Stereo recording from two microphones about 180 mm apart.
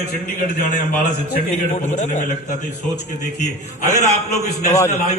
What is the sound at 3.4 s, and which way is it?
A man's voice, 40° left (ahead or behind).